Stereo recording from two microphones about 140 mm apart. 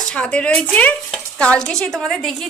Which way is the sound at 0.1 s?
10° left (ahead or behind).